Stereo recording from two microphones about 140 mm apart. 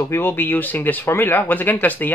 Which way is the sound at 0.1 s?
15° left (ahead or behind).